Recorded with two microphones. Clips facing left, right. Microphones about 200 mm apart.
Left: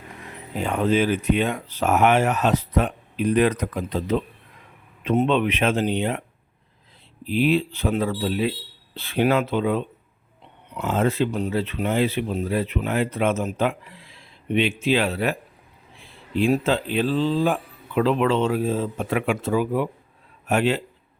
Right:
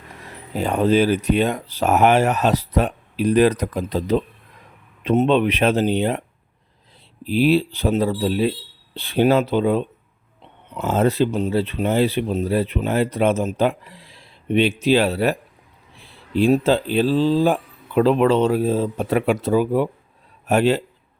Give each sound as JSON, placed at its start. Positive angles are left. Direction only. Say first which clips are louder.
{"t": 0.5, "sound": "speech", "louder": "right 4 dB", "side_deg": -35}
{"t": 7.3, "sound": "speech", "louder": "right 3 dB", "side_deg": -35}
{"t": 10.8, "sound": "speech", "louder": "right 4 dB", "side_deg": -40}
{"t": 11.3, "sound": "speech", "louder": "right 4 dB", "side_deg": -25}
{"t": 16.4, "sound": "speech", "louder": "right 4 dB", "side_deg": -35}